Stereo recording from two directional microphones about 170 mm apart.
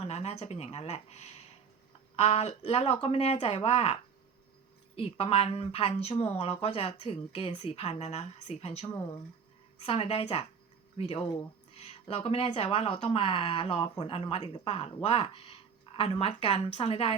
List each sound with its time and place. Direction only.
0.0 s speech: 40° left (ahead or behind)
4.9 s speech: 35° left (ahead or behind)